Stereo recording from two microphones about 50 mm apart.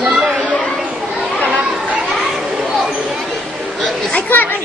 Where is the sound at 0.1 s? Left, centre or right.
Right.